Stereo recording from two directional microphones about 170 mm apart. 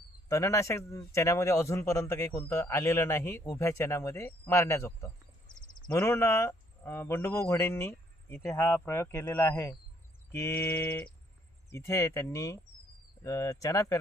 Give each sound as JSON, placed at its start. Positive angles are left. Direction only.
{"t": 0.3, "sound": "a man's voice", "side_deg": 20}